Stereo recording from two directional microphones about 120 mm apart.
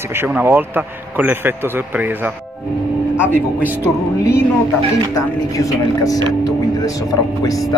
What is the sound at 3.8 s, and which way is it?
Speech, 25° left (ahead or behind).